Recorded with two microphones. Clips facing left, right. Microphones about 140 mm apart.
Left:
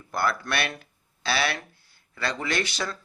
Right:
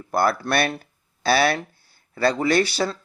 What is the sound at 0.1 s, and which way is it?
Speech, 35° right (ahead or behind).